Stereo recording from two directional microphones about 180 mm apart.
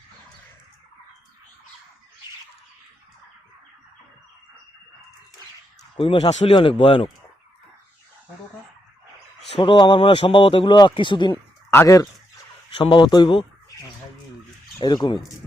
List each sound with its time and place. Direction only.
6.0 s speech: 35° left (ahead or behind)
9.6 s speech: 25° left (ahead or behind)
11.7 s speech: 15° left (ahead or behind)
12.7 s speech: 25° left (ahead or behind)
14.8 s speech: 25° left (ahead or behind)